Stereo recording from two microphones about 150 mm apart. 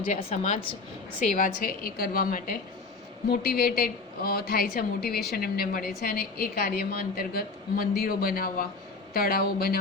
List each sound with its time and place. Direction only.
0.1 s a woman's voice: 45° left (ahead or behind)
1.2 s a woman's voice: 60° left (ahead or behind)
3.2 s a woman's voice: 90° left; by 8.6 s 70° left (ahead or behind)
9.1 s a woman's voice: 80° left